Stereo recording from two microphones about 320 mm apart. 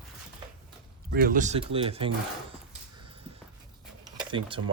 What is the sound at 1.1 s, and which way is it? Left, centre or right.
Speech, right.